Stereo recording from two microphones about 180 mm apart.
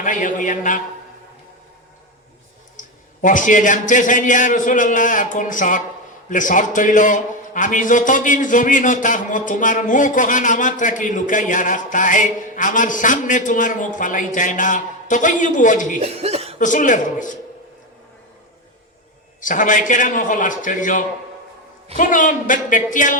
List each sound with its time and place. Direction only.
0.0 s a man's voice: 45° left (ahead or behind)
2.7 s a man's voice: 45° left (ahead or behind)
16.0 s speech: 35° right (ahead or behind)
16.6 s a man's voice: 45° left (ahead or behind)
19.4 s a man's voice: 45° left (ahead or behind)